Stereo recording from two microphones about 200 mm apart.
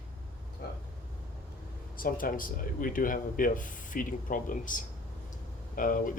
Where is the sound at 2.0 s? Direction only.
45° left (ahead or behind).